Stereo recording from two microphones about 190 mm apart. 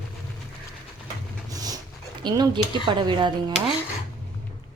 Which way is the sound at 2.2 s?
25° right (ahead or behind).